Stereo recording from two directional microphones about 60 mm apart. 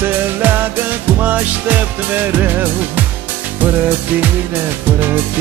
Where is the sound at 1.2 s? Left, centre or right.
Right.